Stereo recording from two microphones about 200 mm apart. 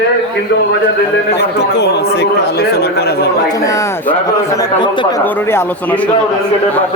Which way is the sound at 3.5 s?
15° left (ahead or behind).